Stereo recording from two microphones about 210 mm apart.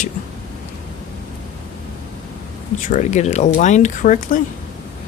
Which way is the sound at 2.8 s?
35° left (ahead or behind).